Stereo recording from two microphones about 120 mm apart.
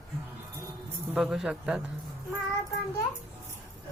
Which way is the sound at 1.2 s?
5° right (ahead or behind).